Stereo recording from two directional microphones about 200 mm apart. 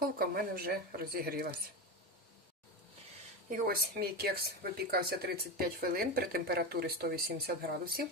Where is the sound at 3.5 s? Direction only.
50° right (ahead or behind).